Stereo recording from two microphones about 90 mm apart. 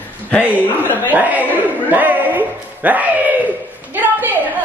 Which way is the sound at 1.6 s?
20° right (ahead or behind).